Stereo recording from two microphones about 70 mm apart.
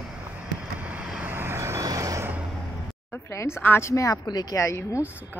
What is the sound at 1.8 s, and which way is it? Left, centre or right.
Vehicle, right.